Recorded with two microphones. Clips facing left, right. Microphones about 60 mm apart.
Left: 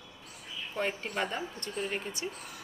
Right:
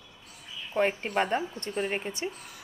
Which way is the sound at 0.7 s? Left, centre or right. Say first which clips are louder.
Right 7 dB; right.